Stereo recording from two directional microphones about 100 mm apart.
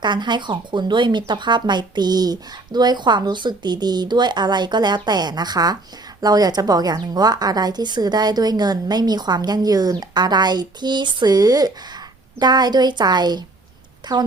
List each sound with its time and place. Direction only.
0.0 s speech: 50° right (ahead or behind)